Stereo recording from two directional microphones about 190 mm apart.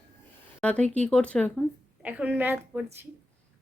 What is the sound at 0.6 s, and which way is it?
Speech, 5° left (ahead or behind).